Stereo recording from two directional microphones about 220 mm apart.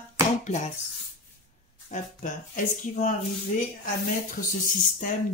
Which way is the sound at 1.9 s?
35° left (ahead or behind).